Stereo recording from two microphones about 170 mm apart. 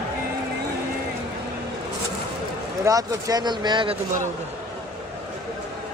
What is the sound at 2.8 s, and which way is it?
Speech, 20° right (ahead or behind).